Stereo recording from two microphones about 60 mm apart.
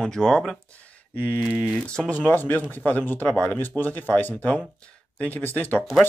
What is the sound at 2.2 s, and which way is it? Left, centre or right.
Speech, left.